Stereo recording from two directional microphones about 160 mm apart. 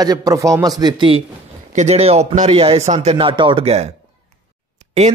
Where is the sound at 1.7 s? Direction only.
45° right (ahead or behind).